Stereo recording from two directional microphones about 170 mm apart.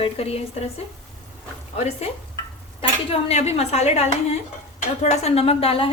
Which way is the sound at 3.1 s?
35° left (ahead or behind).